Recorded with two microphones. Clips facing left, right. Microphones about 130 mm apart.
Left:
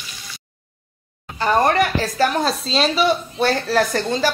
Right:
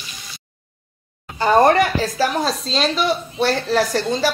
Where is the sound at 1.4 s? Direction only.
25° right (ahead or behind).